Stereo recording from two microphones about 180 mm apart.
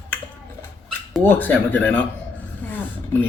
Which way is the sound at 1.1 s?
10° left (ahead or behind).